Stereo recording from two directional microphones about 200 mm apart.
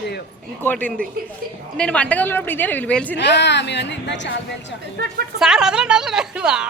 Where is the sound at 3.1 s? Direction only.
60° left (ahead or behind).